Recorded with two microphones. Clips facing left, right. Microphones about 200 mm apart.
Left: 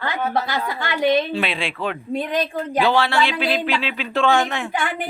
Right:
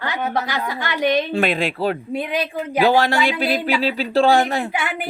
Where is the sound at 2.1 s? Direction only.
10° right (ahead or behind).